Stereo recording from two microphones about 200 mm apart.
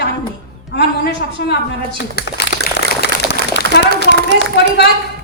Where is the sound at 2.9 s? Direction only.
55° left (ahead or behind).